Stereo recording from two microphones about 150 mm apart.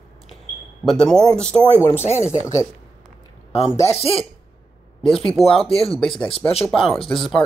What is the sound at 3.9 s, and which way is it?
Speech, 40° left (ahead or behind).